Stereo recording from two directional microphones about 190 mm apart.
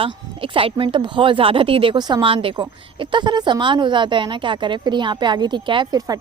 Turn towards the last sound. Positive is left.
turn(degrees=-20)  # may be behind; listen again after turning